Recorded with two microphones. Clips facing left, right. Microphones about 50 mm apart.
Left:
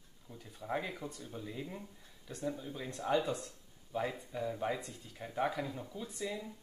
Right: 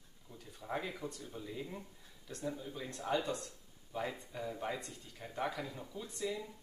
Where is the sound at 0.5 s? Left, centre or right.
Centre.